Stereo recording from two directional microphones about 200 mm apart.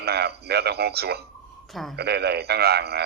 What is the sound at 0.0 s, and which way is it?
A man's voice, 55° right (ahead or behind).